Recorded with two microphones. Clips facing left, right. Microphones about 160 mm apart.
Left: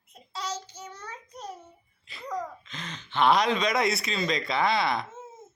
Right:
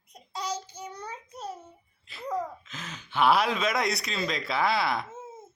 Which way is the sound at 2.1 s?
5° right (ahead or behind).